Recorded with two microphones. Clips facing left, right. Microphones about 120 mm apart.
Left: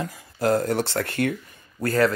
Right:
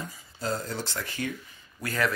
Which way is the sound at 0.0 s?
65° left (ahead or behind).